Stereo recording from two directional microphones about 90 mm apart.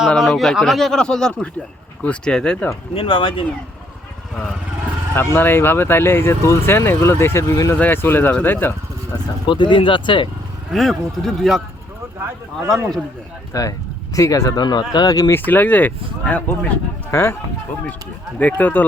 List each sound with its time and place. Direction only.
0.3 s a man's voice: centre (ahead or behind)
2.9 s speech: 80° left
5.1 s speech: 25° left (ahead or behind)
9.5 s speech: 60° left (ahead or behind)
10.7 s a man's voice: 5° left (ahead or behind)
12.6 s a man's voice: 5° left (ahead or behind)
13.5 s speech: 40° left (ahead or behind)
14.6 s speech: 50° left (ahead or behind)
15.3 s speech: 20° left (ahead or behind)
17.1 s speech: 30° left (ahead or behind)
18.3 s speech: 20° left (ahead or behind)